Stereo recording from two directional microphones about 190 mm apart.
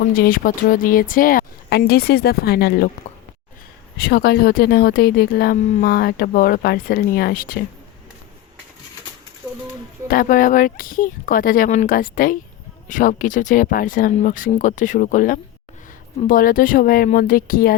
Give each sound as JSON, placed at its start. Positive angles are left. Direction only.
{"t": 0.1, "sound": "speech", "side_deg": 50}
{"t": 3.9, "sound": "speech", "side_deg": 50}
{"t": 10.1, "sound": "speech", "side_deg": 45}